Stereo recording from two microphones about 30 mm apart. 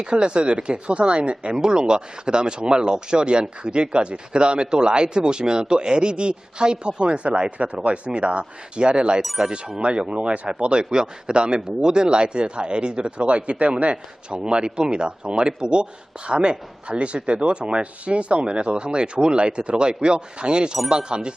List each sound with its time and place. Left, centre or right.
0.0 s speech: right
1.5 s speech: right